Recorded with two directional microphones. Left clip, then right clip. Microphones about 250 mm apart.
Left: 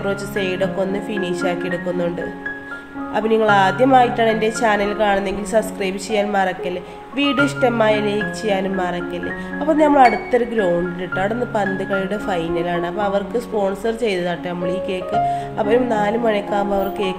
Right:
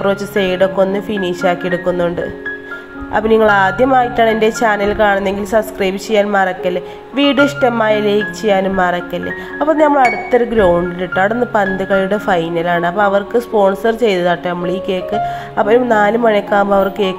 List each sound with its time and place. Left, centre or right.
0.0 s speech: centre
3.2 s speech: centre